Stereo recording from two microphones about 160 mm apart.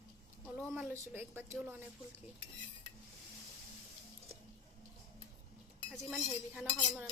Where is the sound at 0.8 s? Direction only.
15° right (ahead or behind).